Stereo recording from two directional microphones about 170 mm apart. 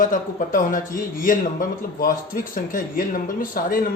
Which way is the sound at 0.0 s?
50° left (ahead or behind).